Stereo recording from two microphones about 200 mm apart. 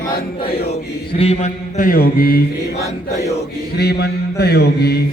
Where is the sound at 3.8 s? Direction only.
55° left (ahead or behind).